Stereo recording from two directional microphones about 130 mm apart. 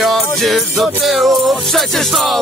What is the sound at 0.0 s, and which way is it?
Music, centre (ahead or behind).